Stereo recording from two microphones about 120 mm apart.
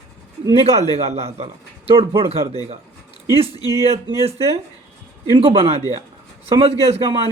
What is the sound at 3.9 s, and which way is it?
Speech, 60° right (ahead or behind).